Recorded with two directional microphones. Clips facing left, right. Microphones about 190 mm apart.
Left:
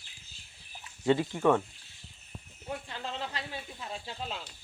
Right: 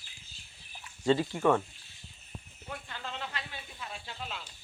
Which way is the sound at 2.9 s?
30° left (ahead or behind).